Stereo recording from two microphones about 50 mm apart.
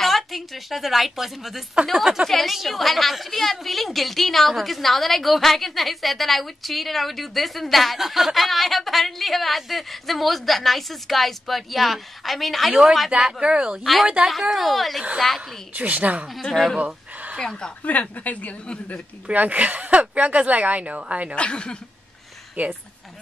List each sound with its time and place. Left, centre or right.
0.0 s a woman's voice: centre
13.4 s speech: right
14.4 s a woman's voice: centre
15.7 s speech: right
16.8 s a sound: right
17.4 s a woman's voice: centre
17.8 s a woman's voice: left
19.2 s speech: right
21.4 s speech: centre
22.6 s speech: right